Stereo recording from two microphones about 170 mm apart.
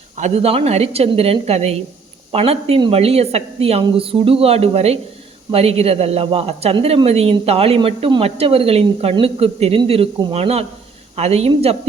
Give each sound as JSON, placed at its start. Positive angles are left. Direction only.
{"t": 0.2, "sound": "speech", "side_deg": -40}